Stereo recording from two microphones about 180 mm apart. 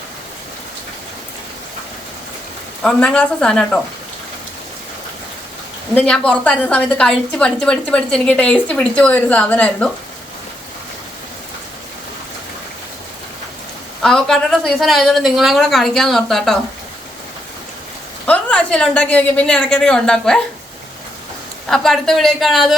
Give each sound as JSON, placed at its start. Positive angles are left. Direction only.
{"t": 2.8, "sound": "a woman's voice", "side_deg": 5}
{"t": 5.9, "sound": "a woman's voice", "side_deg": 5}
{"t": 14.0, "sound": "a woman's voice", "side_deg": 5}
{"t": 18.3, "sound": "a woman's voice", "side_deg": 5}
{"t": 21.7, "sound": "a woman's voice", "side_deg": 0}